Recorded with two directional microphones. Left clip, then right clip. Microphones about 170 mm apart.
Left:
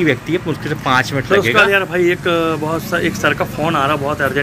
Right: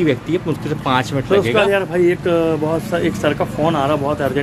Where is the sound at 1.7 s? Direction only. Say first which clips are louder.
Left 1 dB; 25° right (ahead or behind).